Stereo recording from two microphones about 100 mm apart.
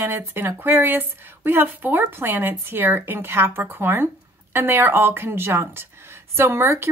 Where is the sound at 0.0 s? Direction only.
25° right (ahead or behind).